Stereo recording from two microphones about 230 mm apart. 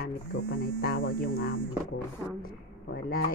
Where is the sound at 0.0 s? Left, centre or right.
Left.